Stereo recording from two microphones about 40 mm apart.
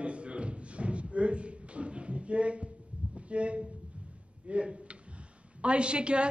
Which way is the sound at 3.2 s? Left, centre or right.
Right.